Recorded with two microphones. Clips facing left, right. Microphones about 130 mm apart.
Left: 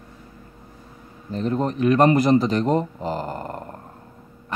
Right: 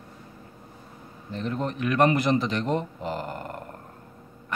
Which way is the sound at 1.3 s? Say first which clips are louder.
Left 6 dB; 35° left (ahead or behind).